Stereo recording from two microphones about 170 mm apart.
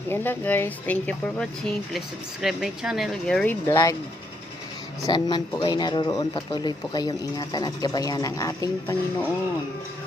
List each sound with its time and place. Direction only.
0.1 s speech: 10° left (ahead or behind)
5.0 s speech: 25° left (ahead or behind)